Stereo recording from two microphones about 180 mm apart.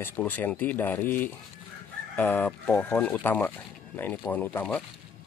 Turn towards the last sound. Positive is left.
turn(degrees=10)  # may be behind; listen again after turning